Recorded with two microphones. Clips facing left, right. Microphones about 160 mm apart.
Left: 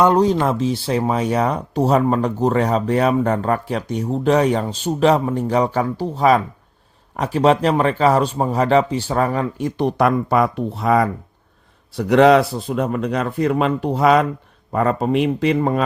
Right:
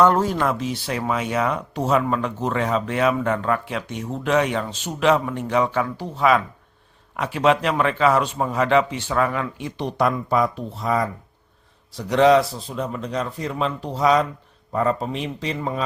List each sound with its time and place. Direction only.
0.0 s speech: 15° left (ahead or behind); by 15.8 s 60° left (ahead or behind)